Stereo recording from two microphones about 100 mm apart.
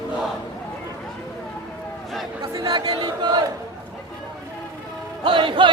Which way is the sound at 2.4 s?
35° right (ahead or behind).